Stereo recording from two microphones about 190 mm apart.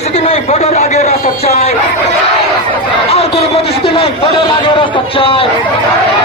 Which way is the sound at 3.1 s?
35° left (ahead or behind).